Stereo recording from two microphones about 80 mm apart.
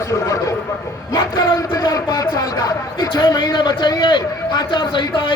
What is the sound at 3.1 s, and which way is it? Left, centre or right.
A man's voice, left.